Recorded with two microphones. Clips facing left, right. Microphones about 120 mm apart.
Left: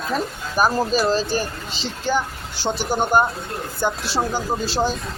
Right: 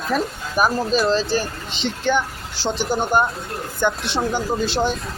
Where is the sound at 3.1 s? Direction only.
45° left (ahead or behind).